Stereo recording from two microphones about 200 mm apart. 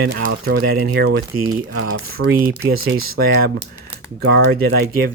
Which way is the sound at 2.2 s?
90° right.